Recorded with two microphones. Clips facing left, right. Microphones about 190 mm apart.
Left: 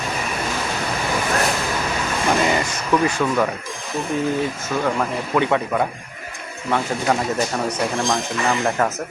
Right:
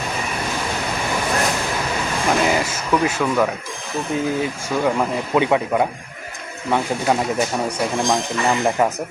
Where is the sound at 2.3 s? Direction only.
5° right (ahead or behind).